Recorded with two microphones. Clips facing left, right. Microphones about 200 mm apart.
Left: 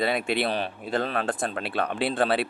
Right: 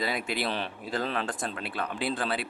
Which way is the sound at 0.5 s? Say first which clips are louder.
Left 5 dB; 50° left (ahead or behind).